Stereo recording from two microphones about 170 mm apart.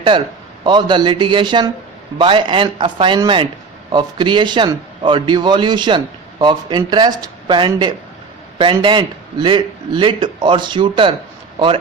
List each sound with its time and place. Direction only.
0.1 s a man's voice: 25° right (ahead or behind)